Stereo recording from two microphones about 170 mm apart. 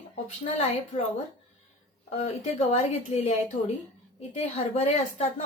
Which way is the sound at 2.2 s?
40° left (ahead or behind).